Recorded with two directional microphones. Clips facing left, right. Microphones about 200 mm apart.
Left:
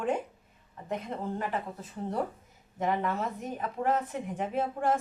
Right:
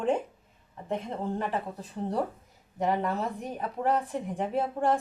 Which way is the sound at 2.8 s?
35° right (ahead or behind).